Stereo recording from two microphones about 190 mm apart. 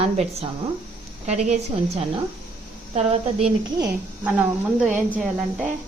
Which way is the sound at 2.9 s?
35° right (ahead or behind).